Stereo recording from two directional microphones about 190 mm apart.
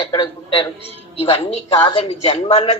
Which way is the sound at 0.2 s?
25° left (ahead or behind).